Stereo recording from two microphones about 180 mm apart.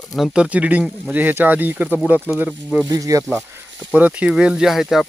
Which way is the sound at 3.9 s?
5° right (ahead or behind).